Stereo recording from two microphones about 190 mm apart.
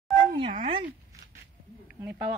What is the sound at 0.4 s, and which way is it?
Speech, 30° right (ahead or behind).